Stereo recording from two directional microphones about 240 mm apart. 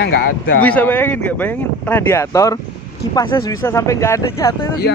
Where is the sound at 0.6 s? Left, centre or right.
Centre.